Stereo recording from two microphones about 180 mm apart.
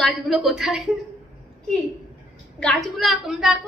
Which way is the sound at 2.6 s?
5° left (ahead or behind).